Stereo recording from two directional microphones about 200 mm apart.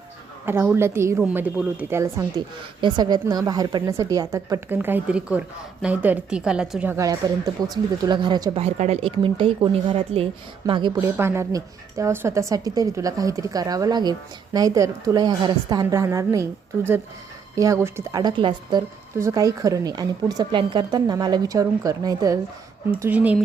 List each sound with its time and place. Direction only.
0.4 s speech: 10° right (ahead or behind)
11.2 s speech: 15° right (ahead or behind)